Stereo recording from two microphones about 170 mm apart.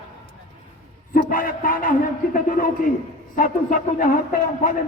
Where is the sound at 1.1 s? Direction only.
55° left (ahead or behind).